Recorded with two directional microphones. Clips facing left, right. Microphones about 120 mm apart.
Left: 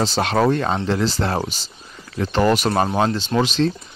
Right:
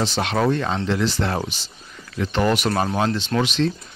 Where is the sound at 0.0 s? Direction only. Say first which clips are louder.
Left 3 dB; 35° left (ahead or behind).